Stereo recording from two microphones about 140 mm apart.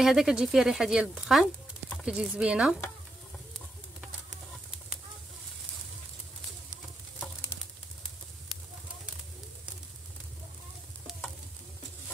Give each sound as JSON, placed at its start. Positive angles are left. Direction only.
{"t": 0.0, "sound": "speech", "side_deg": -5}